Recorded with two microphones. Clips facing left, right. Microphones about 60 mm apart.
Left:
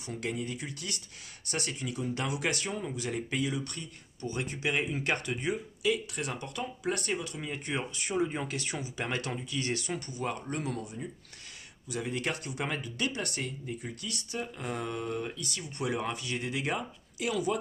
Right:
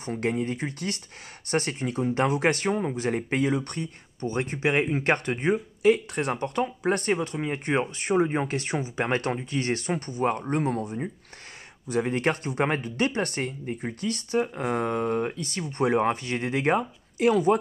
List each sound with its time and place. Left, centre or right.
0.0 s speech: right